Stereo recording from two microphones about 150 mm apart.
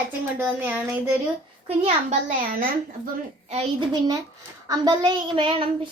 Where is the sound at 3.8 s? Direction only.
25° right (ahead or behind).